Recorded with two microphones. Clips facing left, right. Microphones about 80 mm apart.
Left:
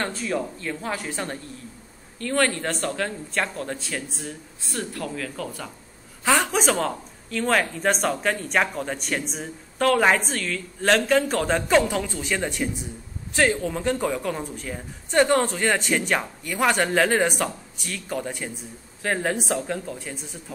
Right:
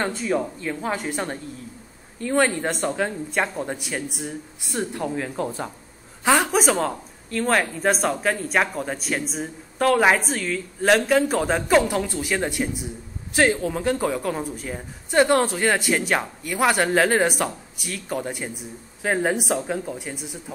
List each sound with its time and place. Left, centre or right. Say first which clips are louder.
0.0 s speech: right 3 dB; centre
6.2 s speech: right 2 dB; centre